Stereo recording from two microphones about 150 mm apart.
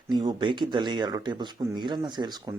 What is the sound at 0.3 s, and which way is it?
Speech, 30° right (ahead or behind).